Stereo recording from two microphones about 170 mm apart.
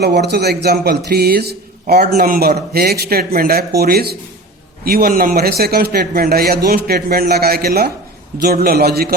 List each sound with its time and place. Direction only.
0.0 s a man's voice: 75° right (ahead or behind)